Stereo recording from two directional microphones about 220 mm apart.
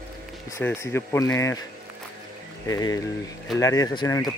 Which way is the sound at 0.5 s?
10° left (ahead or behind).